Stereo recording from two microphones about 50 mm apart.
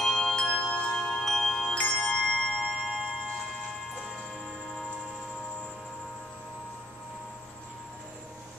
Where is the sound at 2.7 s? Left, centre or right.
Centre.